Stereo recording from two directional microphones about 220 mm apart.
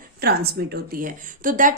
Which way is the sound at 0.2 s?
45° right (ahead or behind).